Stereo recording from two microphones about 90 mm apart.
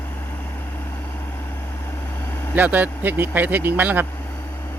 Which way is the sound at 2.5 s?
20° right (ahead or behind).